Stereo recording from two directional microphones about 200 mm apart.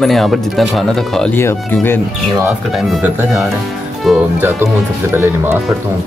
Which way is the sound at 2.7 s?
Centre (ahead or behind).